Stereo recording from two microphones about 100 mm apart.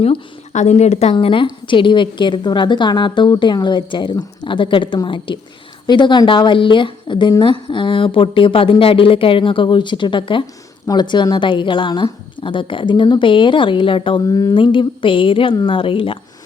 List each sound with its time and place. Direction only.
0.7 s speech: 90° left
1.1 s a woman's voice: 60° left (ahead or behind)
14.3 s a sound: 35° left (ahead or behind)
14.5 s a woman's voice: 55° left (ahead or behind)